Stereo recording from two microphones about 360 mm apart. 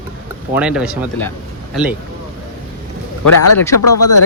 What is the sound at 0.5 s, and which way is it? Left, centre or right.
Speech, centre.